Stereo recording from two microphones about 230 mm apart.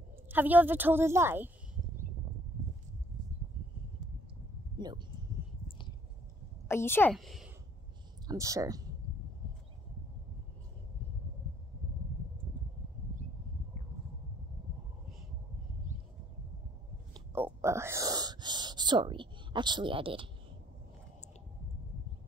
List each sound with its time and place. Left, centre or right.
0.3 s a woman's voice: centre
4.7 s speech: centre
5.7 s a sound: left
6.7 s speech: centre
8.3 s a woman's voice: centre
17.1 s a sound: centre
17.5 s whispering: centre